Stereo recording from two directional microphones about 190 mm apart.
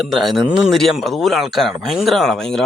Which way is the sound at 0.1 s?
Centre (ahead or behind).